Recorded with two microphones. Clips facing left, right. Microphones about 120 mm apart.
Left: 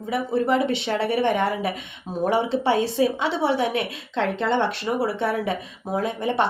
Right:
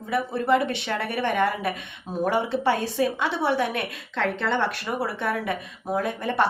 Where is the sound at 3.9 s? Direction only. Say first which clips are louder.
Left 2 dB; 20° left (ahead or behind).